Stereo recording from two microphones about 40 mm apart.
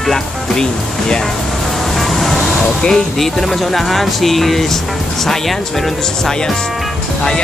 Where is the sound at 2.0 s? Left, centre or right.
Centre.